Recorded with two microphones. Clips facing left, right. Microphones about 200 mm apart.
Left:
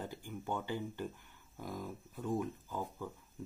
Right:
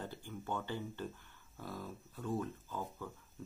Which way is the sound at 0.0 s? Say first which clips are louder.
Left 2 dB; 15° left (ahead or behind).